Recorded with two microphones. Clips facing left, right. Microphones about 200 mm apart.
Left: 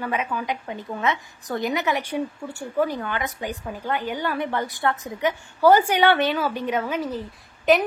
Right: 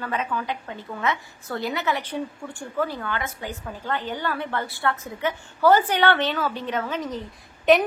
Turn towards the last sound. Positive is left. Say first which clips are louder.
# right 1 dB
turn(degrees=0)  # may be behind; listen again after turning